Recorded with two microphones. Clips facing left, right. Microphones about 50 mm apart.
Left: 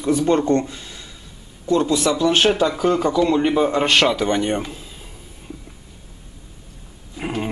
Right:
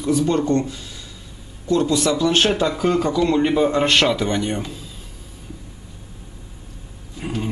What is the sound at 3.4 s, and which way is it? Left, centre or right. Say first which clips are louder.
Speech: even; centre.